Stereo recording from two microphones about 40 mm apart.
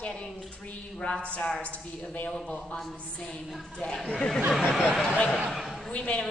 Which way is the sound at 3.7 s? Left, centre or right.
Centre.